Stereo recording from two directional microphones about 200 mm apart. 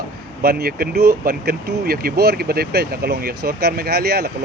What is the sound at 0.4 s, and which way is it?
Speech, 50° right (ahead or behind).